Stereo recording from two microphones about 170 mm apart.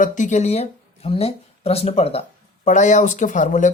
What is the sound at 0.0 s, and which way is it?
Speech, 45° left (ahead or behind).